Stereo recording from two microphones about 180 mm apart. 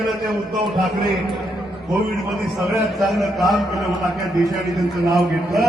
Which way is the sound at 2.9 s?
Centre (ahead or behind).